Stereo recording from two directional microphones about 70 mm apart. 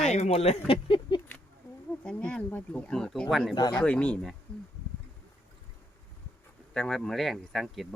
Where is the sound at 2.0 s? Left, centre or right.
Centre.